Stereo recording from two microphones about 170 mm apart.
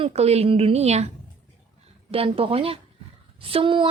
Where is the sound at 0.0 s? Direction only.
35° right (ahead or behind).